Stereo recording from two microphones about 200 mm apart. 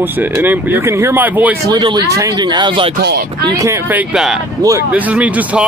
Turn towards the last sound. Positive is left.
turn(degrees=-5)  # may be behind; listen again after turning